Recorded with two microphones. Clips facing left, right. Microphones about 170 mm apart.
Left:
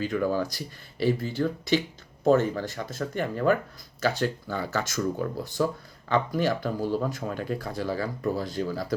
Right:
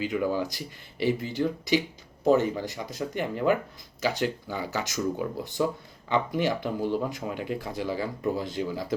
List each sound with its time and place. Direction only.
0.0 s speech: 15° right (ahead or behind)